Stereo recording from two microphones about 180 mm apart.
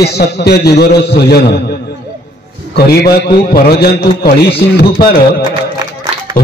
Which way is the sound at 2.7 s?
60° left (ahead or behind).